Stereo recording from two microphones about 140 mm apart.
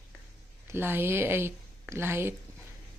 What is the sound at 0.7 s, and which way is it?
A woman's voice, 15° right (ahead or behind).